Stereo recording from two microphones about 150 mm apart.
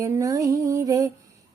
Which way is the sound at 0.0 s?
20° right (ahead or behind).